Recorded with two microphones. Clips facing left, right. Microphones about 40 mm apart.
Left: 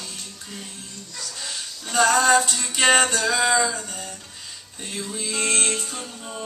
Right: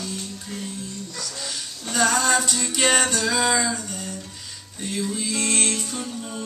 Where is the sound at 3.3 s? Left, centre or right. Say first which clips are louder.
Left 1 dB; centre.